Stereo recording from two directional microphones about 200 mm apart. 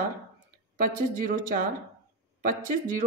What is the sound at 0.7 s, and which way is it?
Speech, 45° right (ahead or behind).